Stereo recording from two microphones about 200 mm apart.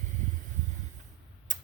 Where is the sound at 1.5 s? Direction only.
40° right (ahead or behind).